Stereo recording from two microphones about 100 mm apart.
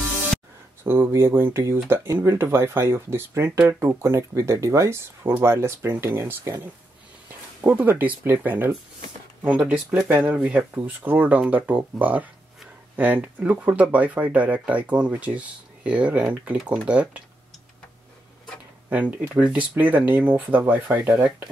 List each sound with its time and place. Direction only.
0.8 s speech: 20° right (ahead or behind)
7.6 s speech: 20° right (ahead or behind)
18.9 s speech: 15° right (ahead or behind)